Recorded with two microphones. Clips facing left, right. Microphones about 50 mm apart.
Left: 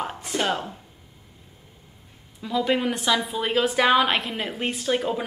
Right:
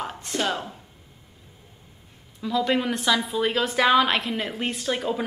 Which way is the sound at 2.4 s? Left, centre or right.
Centre.